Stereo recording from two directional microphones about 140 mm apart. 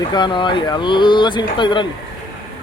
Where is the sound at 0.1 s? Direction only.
35° left (ahead or behind).